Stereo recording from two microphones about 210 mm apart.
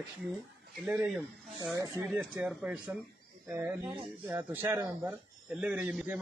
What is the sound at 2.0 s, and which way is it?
Speech, centre (ahead or behind).